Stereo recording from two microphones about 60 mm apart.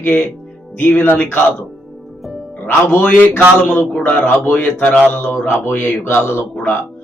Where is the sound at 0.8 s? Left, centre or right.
Left.